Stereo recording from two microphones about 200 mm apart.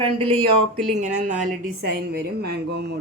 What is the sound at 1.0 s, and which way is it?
Speech, 40° right (ahead or behind).